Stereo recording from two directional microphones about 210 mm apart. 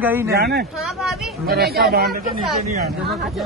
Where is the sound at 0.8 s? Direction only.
Centre (ahead or behind).